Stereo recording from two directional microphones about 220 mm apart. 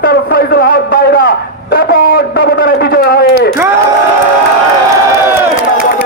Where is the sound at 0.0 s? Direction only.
45° left (ahead or behind).